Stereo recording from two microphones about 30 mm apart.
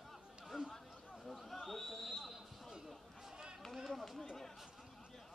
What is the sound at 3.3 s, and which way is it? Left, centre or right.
Run, right.